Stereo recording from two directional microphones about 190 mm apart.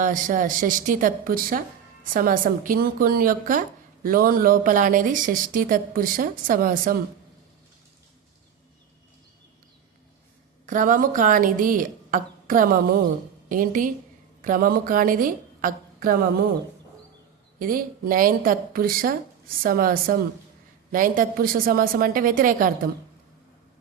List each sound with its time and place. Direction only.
0.0 s speech: 45° right (ahead or behind)
10.7 s a woman's voice: 45° right (ahead or behind)
17.6 s speech: 50° right (ahead or behind)